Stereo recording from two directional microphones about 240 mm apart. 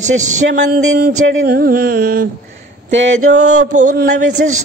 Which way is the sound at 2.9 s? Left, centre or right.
Right.